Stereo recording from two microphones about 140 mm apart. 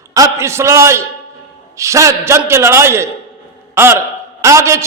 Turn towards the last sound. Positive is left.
turn(degrees=-20)  # may be behind; listen again after turning